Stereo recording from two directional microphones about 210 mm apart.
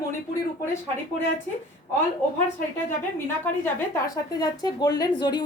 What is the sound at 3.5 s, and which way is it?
A woman's voice, 10° left (ahead or behind).